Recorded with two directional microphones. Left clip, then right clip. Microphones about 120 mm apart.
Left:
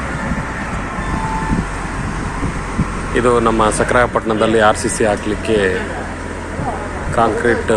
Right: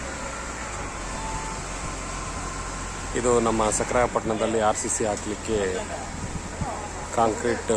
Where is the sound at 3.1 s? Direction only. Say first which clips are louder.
Left 9 dB; 20° right (ahead or behind).